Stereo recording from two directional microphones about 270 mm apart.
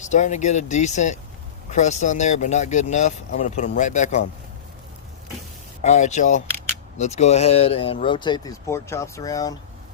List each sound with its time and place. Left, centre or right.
0.0 s speech: left
5.8 s speech: left